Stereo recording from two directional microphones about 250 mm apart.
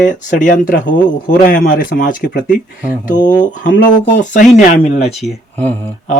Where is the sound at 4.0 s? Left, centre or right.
Left.